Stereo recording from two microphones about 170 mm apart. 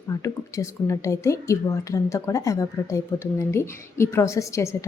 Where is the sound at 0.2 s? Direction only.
20° left (ahead or behind).